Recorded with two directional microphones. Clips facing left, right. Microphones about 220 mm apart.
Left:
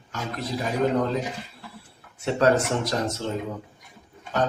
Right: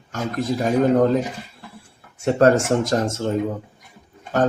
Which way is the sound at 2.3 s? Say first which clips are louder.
Right 5 dB; 45° right (ahead or behind).